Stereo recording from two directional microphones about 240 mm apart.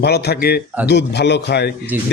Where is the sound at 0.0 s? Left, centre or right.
Left.